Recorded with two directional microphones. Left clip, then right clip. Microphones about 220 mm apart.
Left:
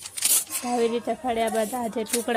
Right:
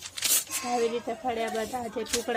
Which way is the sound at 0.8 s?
35° left (ahead or behind).